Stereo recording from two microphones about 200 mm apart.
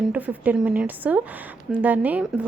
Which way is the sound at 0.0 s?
5° right (ahead or behind).